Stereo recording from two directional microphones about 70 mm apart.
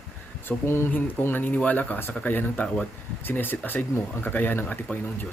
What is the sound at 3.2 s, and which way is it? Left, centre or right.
Speech, left.